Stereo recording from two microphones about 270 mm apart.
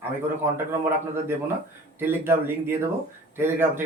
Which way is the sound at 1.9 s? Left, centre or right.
Centre.